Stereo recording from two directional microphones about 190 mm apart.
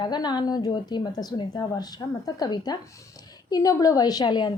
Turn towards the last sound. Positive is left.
turn(degrees=20)  # may be behind; listen again after turning